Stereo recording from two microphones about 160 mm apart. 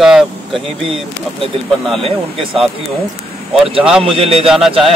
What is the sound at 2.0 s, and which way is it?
Speech, 35° right (ahead or behind).